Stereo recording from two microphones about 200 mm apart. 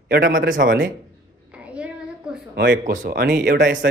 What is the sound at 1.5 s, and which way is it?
Child singing, 5° right (ahead or behind).